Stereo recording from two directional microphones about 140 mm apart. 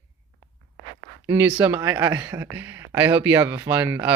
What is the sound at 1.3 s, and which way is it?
Speech, 15° right (ahead or behind).